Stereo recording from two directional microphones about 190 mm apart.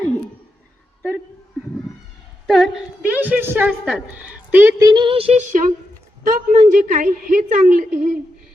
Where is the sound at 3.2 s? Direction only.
10° right (ahead or behind).